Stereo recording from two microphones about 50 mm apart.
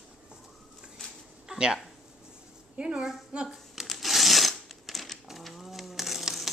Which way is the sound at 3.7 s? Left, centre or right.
Centre.